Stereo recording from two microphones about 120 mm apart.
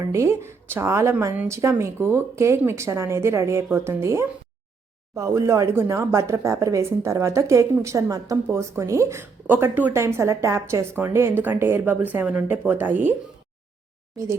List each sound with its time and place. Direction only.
0.0 s speech: 25° right (ahead or behind)